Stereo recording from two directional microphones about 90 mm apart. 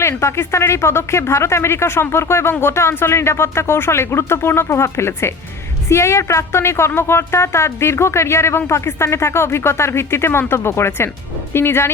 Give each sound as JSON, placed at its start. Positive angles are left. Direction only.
{"t": 0.0, "sound": "speech", "side_deg": 30}